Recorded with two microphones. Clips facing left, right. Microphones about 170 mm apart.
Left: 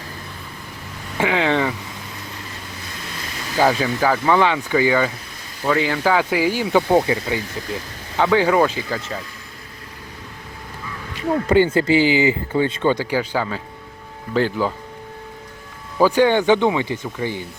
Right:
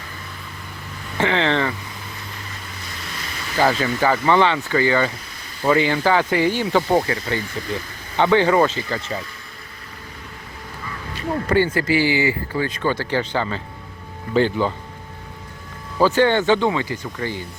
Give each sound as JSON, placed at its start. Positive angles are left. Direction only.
{"t": 1.2, "sound": "speech", "side_deg": 10}
{"t": 3.6, "sound": "speech", "side_deg": 5}
{"t": 11.4, "sound": "speech", "side_deg": 20}
{"t": 16.0, "sound": "speech", "side_deg": 10}